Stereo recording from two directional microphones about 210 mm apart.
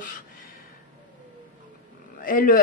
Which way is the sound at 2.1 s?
40° left (ahead or behind).